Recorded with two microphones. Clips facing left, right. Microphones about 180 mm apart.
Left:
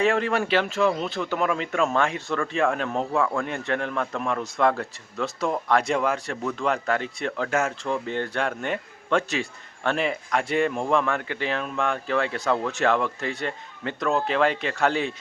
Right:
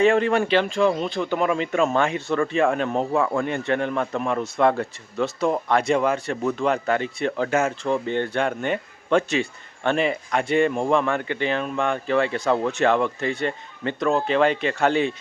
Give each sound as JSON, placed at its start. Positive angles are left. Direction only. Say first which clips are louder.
{"t": 0.0, "sound": "a man's voice", "louder": "right 4 dB", "side_deg": 0}